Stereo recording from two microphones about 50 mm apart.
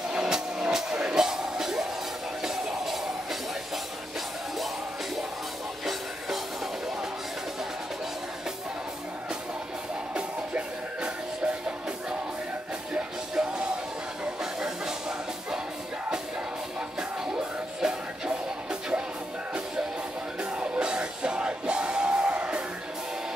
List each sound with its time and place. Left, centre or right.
0.1 s music: centre
10.1 s music: right
12.9 s music: centre
17.8 s music: centre
20.5 s music: right